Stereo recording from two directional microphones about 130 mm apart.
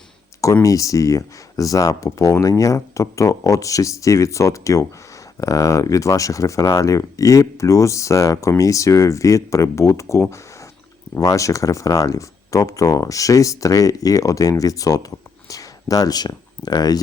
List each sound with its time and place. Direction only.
0.6 s speech: 25° left (ahead or behind)